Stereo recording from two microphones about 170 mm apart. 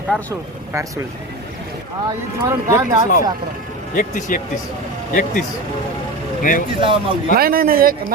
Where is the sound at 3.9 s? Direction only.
50° left (ahead or behind).